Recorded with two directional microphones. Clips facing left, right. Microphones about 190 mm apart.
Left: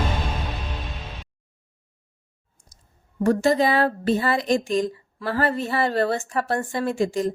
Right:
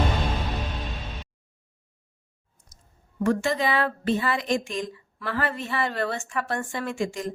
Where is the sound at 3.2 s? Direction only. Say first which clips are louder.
Left 5 dB; 35° left (ahead or behind).